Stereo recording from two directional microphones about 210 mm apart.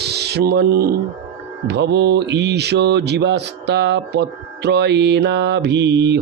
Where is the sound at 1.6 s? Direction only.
55° right (ahead or behind).